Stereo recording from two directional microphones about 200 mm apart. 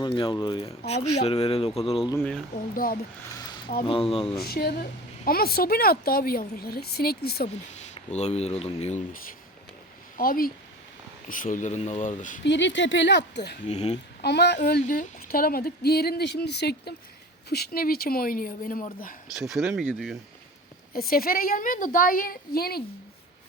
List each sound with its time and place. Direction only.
0.0 s speech: 25° left (ahead or behind)
2.1 s speech: 5° left (ahead or behind)
2.7 s a woman's voice: 45° left (ahead or behind)
3.3 s a sound: 20° left (ahead or behind)
3.8 s speech: 25° left (ahead or behind)
4.4 s a woman's voice: 50° left (ahead or behind)
7.4 s speech: 35° left (ahead or behind)
10.2 s a woman's voice: 45° left (ahead or behind)
12.5 s speech: 65° left (ahead or behind)
13.7 s speech: 35° left (ahead or behind)
14.2 s a woman's voice: 55° left (ahead or behind)
19.4 s speech: centre (ahead or behind)
20.9 s a woman's voice: 50° left (ahead or behind)